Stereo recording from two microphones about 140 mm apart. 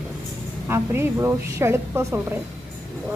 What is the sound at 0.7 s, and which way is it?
A woman's voice, 15° right (ahead or behind).